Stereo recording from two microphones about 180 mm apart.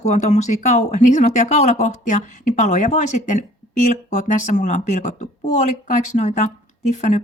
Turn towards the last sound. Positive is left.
turn(degrees=40)  # may be behind; listen again after turning